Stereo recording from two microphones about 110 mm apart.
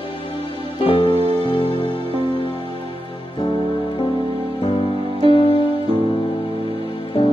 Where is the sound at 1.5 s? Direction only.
55° left (ahead or behind).